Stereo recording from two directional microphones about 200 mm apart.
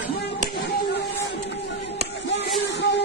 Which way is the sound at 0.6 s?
55° left (ahead or behind).